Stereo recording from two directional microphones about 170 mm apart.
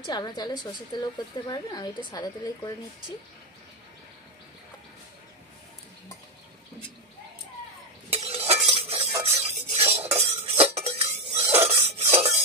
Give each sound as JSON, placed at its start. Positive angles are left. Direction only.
{"t": 0.0, "sound": "a woman's voice", "side_deg": 25}
{"t": 8.1, "sound": "stir", "side_deg": -35}
{"t": 10.4, "sound": "dishes", "side_deg": -35}